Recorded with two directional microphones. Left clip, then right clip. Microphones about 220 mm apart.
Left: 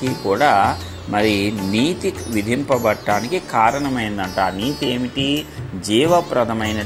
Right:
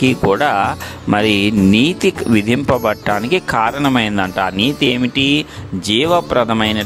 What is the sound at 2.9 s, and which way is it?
Speech, 45° right (ahead or behind).